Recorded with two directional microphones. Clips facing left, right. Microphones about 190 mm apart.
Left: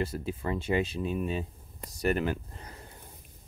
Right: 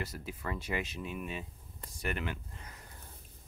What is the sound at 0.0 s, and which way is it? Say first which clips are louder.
Speech: left 8 dB; 30° left (ahead or behind).